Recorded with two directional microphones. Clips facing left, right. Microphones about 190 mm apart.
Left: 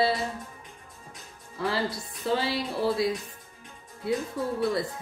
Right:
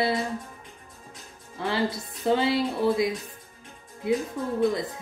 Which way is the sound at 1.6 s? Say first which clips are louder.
Right 2 dB; 25° right (ahead or behind).